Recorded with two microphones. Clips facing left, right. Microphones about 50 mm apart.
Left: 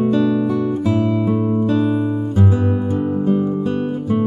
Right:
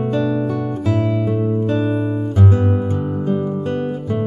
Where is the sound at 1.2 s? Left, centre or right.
Centre.